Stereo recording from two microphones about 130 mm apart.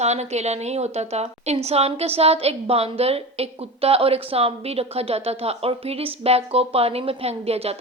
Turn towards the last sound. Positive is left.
turn(degrees=-50)  # may be behind; listen again after turning